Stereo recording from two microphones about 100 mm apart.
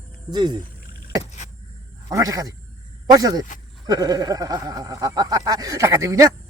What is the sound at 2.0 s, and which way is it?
Speech, 35° right (ahead or behind).